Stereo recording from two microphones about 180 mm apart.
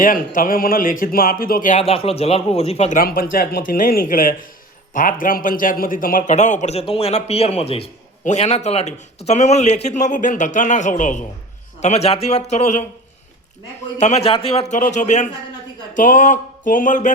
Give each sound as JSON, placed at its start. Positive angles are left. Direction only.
{"t": 0.0, "sound": "a man's voice", "side_deg": 50}
{"t": 1.8, "sound": "a man's voice", "side_deg": 35}
{"t": 3.3, "sound": "a man's voice", "side_deg": 55}
{"t": 14.0, "sound": "a man's voice", "side_deg": 35}